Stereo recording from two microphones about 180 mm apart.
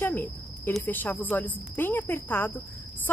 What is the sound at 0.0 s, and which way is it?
Speech, 10° left (ahead or behind).